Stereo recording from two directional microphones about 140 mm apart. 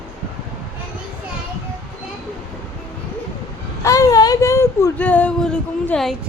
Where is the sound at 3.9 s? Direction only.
25° left (ahead or behind).